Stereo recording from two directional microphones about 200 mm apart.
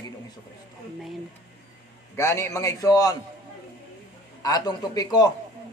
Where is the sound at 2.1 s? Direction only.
15° left (ahead or behind).